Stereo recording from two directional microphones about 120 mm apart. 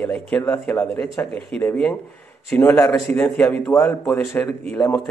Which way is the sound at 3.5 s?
15° left (ahead or behind).